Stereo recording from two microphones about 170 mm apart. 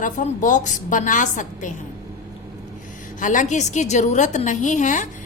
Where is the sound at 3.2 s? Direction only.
50° left (ahead or behind).